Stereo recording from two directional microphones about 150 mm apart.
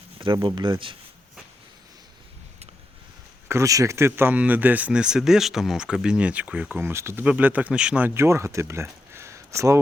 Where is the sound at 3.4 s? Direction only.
20° right (ahead or behind).